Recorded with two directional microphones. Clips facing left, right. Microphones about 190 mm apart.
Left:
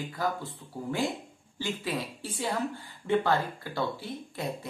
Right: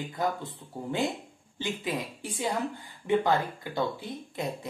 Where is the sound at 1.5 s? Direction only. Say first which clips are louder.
Even; 20° right (ahead or behind).